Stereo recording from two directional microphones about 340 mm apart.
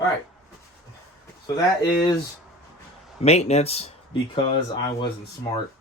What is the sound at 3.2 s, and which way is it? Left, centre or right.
Speech, centre.